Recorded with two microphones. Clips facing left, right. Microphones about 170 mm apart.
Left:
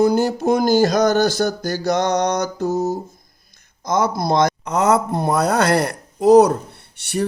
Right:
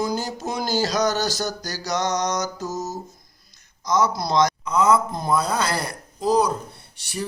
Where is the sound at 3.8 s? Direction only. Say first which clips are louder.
Left 2 dB; 55° left (ahead or behind).